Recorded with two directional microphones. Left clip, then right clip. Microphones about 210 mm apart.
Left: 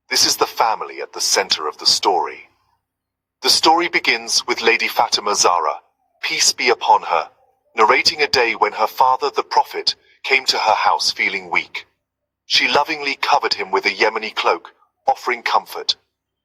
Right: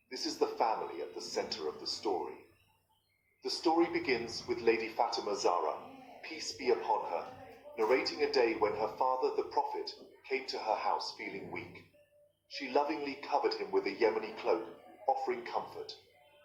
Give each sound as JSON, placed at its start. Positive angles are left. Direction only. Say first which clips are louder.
{"t": 0.1, "sound": "a man's voice", "louder": "left 18 dB", "side_deg": 40}
{"t": 3.4, "sound": "a man's voice", "louder": "left 17 dB", "side_deg": 40}